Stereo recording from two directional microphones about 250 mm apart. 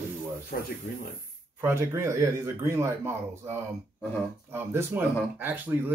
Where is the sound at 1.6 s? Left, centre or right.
Centre.